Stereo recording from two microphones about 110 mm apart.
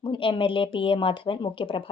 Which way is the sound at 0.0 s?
50° left (ahead or behind).